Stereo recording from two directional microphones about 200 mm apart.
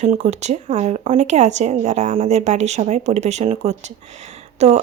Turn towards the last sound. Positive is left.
turn(degrees=-35)  # may be behind; listen again after turning